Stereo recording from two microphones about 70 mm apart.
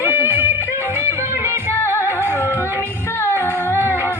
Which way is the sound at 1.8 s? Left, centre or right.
Left.